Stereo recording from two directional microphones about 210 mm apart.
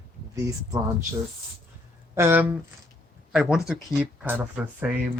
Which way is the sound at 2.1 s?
10° right (ahead or behind).